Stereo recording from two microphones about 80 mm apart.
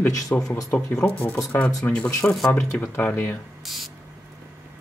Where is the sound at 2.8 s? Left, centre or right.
Left.